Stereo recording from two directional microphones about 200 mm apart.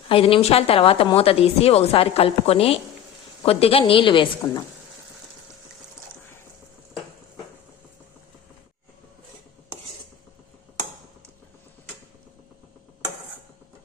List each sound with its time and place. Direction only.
0.1 s a woman's voice: 25° left (ahead or behind)